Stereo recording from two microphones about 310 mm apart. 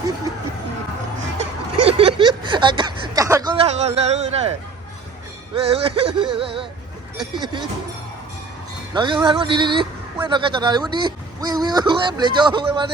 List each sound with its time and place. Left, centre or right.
1.9 s speech: centre
5.5 s speech: centre
8.9 s speech: centre